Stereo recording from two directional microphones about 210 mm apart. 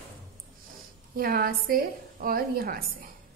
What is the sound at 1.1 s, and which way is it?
A woman's voice, 45° right (ahead or behind).